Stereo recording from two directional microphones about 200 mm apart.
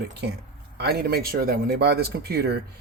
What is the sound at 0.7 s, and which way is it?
Speech, 50° right (ahead or behind).